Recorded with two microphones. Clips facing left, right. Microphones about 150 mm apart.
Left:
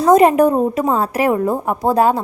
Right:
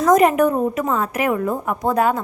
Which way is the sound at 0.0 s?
30° left (ahead or behind).